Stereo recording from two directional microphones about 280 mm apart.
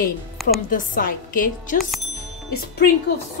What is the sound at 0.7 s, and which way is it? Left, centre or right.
Speech, left.